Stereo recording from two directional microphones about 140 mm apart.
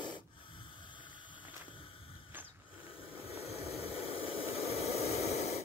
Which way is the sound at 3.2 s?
45° left (ahead or behind).